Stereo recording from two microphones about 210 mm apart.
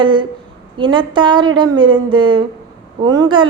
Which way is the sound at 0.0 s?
25° right (ahead or behind).